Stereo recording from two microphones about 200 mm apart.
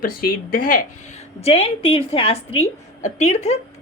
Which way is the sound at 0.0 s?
45° left (ahead or behind).